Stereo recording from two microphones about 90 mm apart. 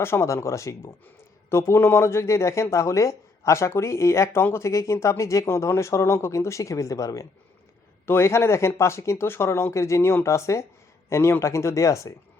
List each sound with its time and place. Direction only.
0.0 s speech: 30° left (ahead or behind)